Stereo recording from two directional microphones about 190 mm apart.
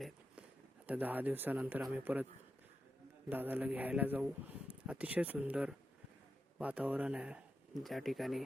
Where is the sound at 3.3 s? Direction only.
10° right (ahead or behind).